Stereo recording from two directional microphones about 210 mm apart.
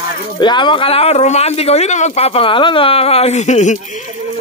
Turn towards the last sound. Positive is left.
turn(degrees=35)  # may be behind; listen again after turning